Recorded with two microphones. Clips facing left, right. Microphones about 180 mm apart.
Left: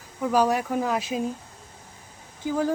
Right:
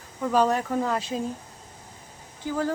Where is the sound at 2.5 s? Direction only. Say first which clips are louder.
Left 2 dB; 15° left (ahead or behind).